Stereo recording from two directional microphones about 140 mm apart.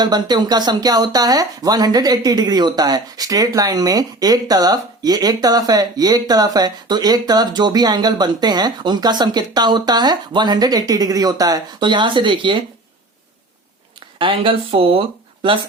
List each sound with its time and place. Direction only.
0.0 s speech: 30° right (ahead or behind)
14.2 s speech: 40° right (ahead or behind)